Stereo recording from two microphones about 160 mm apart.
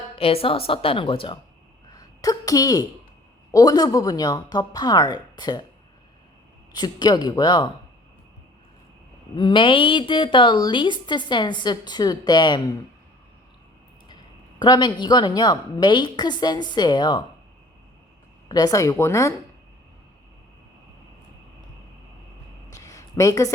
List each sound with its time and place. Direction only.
0.2 s a woman's voice: 35° left (ahead or behind)
1.9 s a sound: 25° left (ahead or behind)
3.5 s a woman's voice: 25° left (ahead or behind)
6.7 s a woman's voice: 25° left (ahead or behind)
9.3 s a woman's voice: 30° left (ahead or behind)
14.6 s a woman's voice: 25° left (ahead or behind)
18.4 s a woman's voice: 25° left (ahead or behind)
22.7 s a sound: 20° left (ahead or behind)